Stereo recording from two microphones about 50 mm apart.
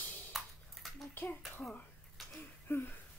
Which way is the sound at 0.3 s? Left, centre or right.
Centre.